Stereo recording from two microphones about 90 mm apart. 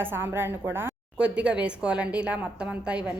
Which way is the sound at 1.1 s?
10° right (ahead or behind).